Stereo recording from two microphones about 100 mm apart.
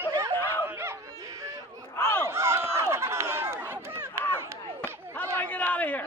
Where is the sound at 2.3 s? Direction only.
25° right (ahead or behind).